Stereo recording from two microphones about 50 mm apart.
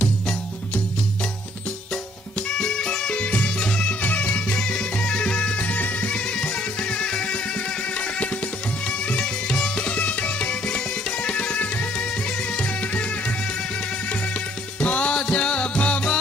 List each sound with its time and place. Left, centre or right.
2.5 s music: centre
4.0 s music: left
11.9 s music: centre
12.8 s music: left